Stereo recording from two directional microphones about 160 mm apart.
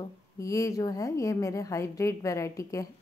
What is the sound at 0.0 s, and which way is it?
A woman's voice, 20° left (ahead or behind).